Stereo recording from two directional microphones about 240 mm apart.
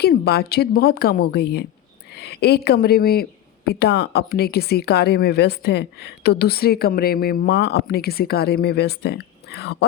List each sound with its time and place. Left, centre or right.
0.0 s speech: left